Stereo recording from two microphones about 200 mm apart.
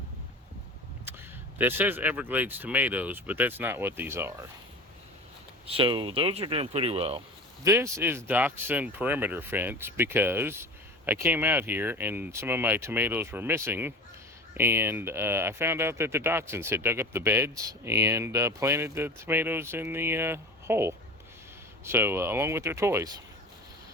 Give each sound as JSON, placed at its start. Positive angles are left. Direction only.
{"t": 1.5, "sound": "speech", "side_deg": -10}
{"t": 5.6, "sound": "speech", "side_deg": -25}
{"t": 7.6, "sound": "speech", "side_deg": -15}